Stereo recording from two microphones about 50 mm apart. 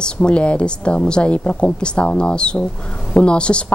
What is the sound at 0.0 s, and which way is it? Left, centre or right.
Speech, left.